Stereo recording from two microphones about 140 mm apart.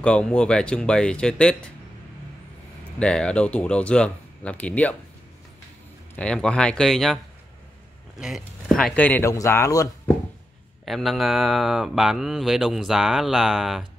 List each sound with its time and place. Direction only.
0.0 s speech: 5° left (ahead or behind)
3.0 s speech: 5° left (ahead or behind)
6.1 s speech: 5° left (ahead or behind)
8.2 s speech: centre (ahead or behind); by 10.1 s 20° left (ahead or behind)
10.9 s speech: centre (ahead or behind)